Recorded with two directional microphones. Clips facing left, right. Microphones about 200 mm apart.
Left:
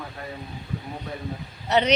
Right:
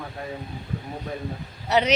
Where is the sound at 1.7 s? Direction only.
5° right (ahead or behind).